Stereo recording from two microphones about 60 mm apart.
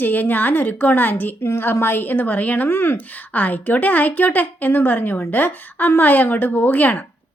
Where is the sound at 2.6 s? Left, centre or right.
Left.